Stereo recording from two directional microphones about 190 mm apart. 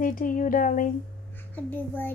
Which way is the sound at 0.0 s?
45° left (ahead or behind).